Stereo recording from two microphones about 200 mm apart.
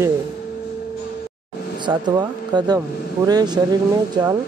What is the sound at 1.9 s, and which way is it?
Speech, 20° right (ahead or behind).